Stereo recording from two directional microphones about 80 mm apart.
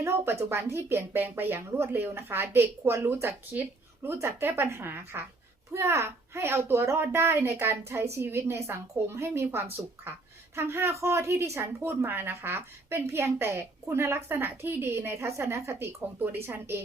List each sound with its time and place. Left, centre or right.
0.0 s a woman's voice: right